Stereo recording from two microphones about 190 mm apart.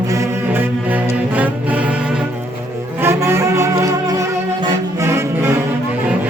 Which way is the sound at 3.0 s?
15° right (ahead or behind).